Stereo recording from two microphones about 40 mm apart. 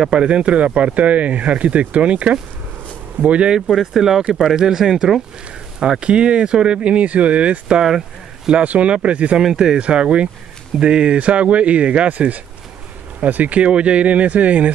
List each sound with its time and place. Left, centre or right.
0.1 s speech: right
3.9 s speech: centre
5.8 s speech: right
8.6 s speech: right
9.4 s speech: centre
9.8 s speech: right
12.1 s speech: right